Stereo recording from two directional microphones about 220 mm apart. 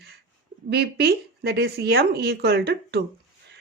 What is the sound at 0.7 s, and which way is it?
A woman's voice, 45° right (ahead or behind).